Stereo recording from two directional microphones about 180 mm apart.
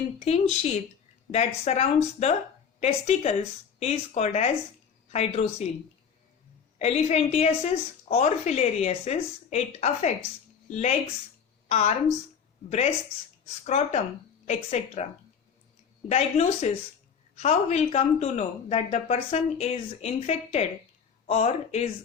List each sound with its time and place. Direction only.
0.3 s a woman's voice: 35° left (ahead or behind)
6.7 s a woman's voice: 40° left (ahead or behind)
11.7 s a woman's voice: 40° left (ahead or behind)
13.7 s a woman's voice: 40° left (ahead or behind)
16.0 s a woman's voice: 35° left (ahead or behind)